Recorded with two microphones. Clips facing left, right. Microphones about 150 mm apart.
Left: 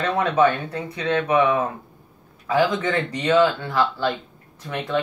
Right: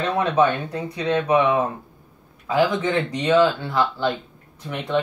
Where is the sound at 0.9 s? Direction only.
10° right (ahead or behind).